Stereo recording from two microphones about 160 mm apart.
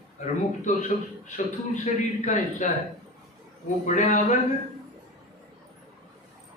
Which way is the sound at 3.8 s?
50° left (ahead or behind).